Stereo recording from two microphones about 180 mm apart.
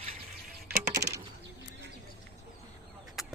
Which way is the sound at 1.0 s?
20° right (ahead or behind).